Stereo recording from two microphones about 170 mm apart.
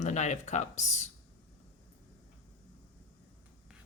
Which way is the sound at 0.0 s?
45° left (ahead or behind).